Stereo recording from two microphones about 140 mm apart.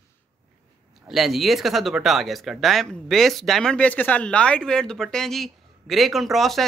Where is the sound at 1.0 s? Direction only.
Centre (ahead or behind).